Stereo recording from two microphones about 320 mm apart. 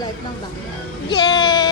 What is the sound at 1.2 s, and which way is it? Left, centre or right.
Speech, centre.